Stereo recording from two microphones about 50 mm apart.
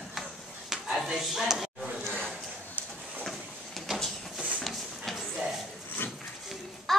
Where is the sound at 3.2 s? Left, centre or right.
Centre.